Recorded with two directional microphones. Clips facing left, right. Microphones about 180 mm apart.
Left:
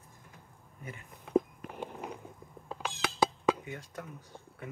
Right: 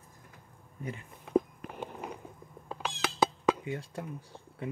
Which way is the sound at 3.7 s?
30° right (ahead or behind).